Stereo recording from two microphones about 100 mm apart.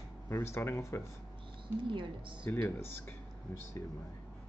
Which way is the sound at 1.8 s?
55° right (ahead or behind).